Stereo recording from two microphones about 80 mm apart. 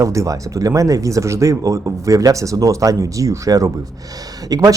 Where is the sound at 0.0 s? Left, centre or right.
Right.